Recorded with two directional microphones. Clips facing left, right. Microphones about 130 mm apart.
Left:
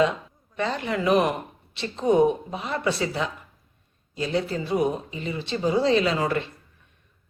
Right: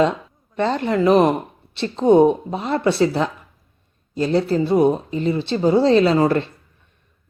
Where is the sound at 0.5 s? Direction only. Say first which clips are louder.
Right 7 dB; 35° right (ahead or behind).